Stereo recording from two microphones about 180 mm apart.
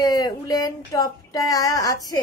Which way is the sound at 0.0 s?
20° left (ahead or behind).